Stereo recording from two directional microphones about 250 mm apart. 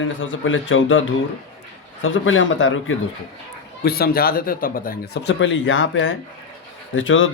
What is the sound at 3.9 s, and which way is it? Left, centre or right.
Speech, left.